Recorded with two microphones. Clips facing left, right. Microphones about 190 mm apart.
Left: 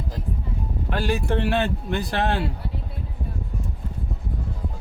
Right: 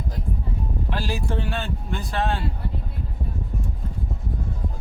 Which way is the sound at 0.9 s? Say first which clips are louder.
Left 5 dB; 60° left (ahead or behind).